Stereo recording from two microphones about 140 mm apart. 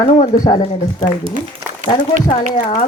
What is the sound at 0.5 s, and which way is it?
Speech, 50° left (ahead or behind).